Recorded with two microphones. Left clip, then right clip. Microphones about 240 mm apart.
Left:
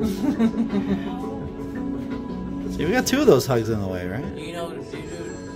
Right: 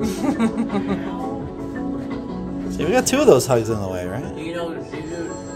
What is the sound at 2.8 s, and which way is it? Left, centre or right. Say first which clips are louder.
Speech: right 3 dB; left.